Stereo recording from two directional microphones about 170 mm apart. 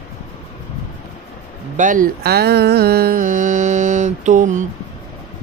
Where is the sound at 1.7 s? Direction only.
50° right (ahead or behind).